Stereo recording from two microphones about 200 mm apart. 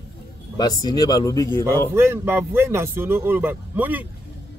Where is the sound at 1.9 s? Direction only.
10° right (ahead or behind).